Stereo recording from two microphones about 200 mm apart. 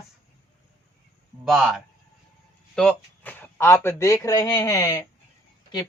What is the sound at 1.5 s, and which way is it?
Speech, centre (ahead or behind).